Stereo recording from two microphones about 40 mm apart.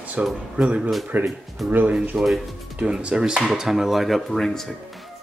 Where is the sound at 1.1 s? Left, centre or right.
Right.